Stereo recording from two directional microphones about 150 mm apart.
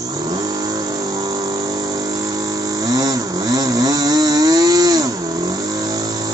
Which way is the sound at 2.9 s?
25° right (ahead or behind).